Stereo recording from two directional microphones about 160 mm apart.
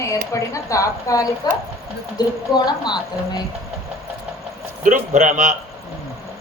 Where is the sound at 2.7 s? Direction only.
25° left (ahead or behind).